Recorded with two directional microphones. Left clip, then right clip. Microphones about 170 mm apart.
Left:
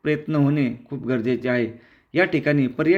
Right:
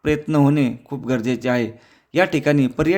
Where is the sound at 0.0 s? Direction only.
45° right (ahead or behind).